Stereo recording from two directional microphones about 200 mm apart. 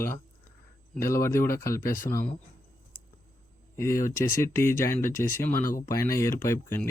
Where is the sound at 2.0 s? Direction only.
45° left (ahead or behind).